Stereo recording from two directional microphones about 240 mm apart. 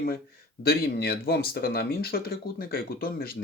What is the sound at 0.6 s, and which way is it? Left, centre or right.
Speech, left.